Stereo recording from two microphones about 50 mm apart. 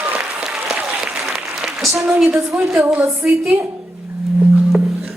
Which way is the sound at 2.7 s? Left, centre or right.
Right.